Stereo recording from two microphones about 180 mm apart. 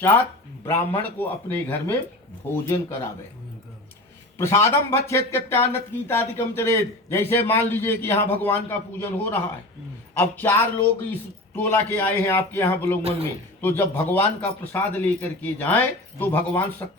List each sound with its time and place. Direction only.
0.6 s speech: 15° left (ahead or behind)
4.4 s speech: 15° left (ahead or behind)
13.0 s a man's voice: 35° right (ahead or behind)
13.6 s speech: 10° left (ahead or behind)